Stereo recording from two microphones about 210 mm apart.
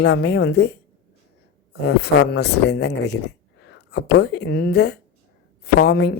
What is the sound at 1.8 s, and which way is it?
Speech, 50° left (ahead or behind).